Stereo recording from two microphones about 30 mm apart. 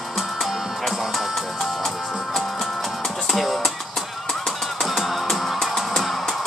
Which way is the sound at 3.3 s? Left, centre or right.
Centre.